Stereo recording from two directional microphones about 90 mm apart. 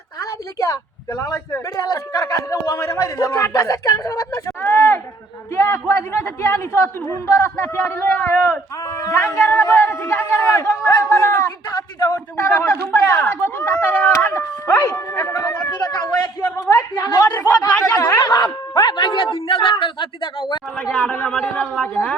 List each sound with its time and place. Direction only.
0.2 s a woman's voice: 40° left (ahead or behind)
11.9 s a sound: 45° left (ahead or behind)
12.4 s a man's voice: 25° left (ahead or behind)
15.7 s a man's voice: 45° left (ahead or behind)
16.7 s speech: 35° left (ahead or behind)
17.7 s a man's voice: 20° left (ahead or behind)
18.2 s a man's voice: 45° left (ahead or behind); by 20.3 s 65° left (ahead or behind)
20.7 s a man's voice: 5° left (ahead or behind)
21.0 s a man's voice: 20° left (ahead or behind)
21.2 s speech: 10° left (ahead or behind)
21.5 s a man's voice: 20° left (ahead or behind)